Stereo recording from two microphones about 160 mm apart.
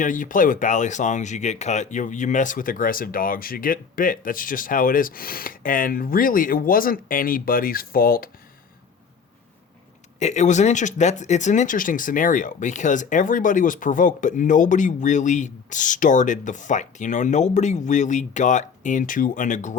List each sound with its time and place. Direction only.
0.0 s speech: 55° left (ahead or behind)
10.2 s speech: 45° left (ahead or behind)